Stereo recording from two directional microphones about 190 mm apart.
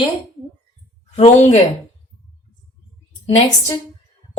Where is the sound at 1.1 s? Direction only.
35° left (ahead or behind).